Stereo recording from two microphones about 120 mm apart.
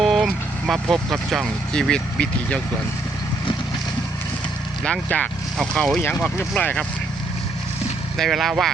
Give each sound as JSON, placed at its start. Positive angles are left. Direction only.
{"t": 0.0, "sound": "speech", "side_deg": 0}
{"t": 4.8, "sound": "speech", "side_deg": 10}
{"t": 6.0, "sound": "speech", "side_deg": 20}
{"t": 8.1, "sound": "speech", "side_deg": 0}